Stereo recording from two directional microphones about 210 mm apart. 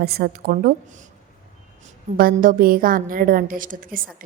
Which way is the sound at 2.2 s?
45° right (ahead or behind).